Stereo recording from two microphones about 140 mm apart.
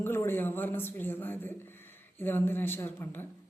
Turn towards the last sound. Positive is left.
turn(degrees=15)  # may be behind; listen again after turning